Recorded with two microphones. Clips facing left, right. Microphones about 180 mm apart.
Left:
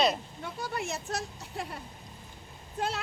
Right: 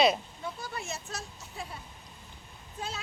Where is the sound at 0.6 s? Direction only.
60° left (ahead or behind).